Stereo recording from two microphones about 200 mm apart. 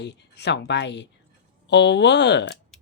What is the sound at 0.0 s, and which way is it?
Speech, 60° left (ahead or behind).